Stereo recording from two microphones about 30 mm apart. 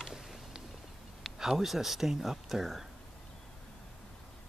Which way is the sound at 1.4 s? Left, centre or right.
Centre.